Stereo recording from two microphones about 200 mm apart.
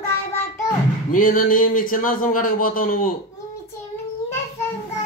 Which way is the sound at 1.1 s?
45° left (ahead or behind).